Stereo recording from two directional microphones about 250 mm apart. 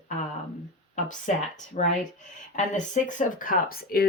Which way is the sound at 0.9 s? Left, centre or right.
Left.